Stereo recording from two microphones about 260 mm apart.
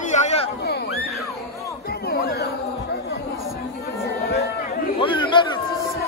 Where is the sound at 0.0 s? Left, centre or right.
Left.